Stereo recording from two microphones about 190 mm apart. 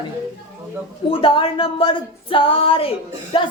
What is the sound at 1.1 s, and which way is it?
A woman's voice, 25° left (ahead or behind).